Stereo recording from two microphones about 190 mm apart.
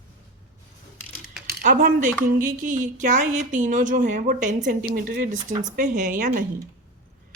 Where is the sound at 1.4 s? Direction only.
45° right (ahead or behind).